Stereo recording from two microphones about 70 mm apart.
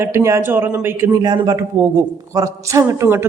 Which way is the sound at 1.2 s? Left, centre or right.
Right.